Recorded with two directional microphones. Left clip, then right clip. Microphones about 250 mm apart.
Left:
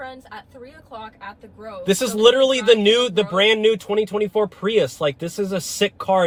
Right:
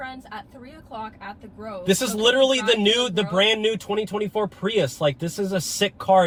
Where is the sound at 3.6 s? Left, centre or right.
Left.